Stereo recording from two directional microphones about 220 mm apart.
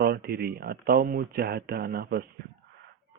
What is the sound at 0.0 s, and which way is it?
Speech, 45° right (ahead or behind).